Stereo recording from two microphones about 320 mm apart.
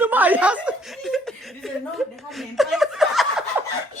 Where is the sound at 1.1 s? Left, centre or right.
Centre.